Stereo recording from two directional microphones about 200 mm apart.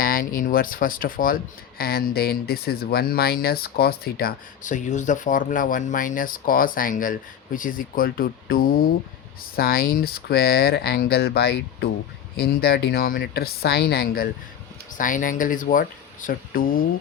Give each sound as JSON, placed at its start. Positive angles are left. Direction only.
{"t": 0.0, "sound": "speech", "side_deg": 45}